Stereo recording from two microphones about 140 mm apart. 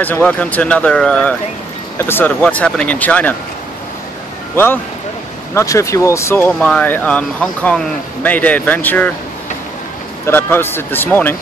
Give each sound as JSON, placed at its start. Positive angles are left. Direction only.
{"t": 0.0, "sound": "speech", "side_deg": 10}
{"t": 5.5, "sound": "speech", "side_deg": 20}
{"t": 10.2, "sound": "speech", "side_deg": 15}